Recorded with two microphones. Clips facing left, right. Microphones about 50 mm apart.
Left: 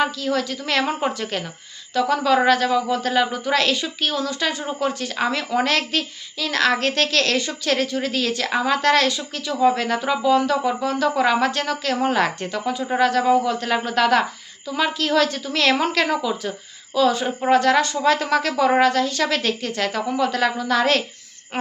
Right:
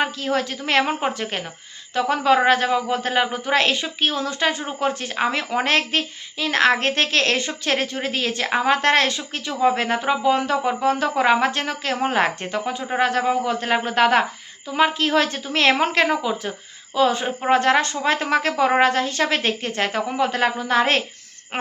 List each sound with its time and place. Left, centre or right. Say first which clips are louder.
0.0 s a woman's voice: left 1 dB; right